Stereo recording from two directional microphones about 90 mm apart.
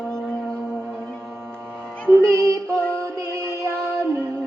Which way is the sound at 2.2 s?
35° right (ahead or behind).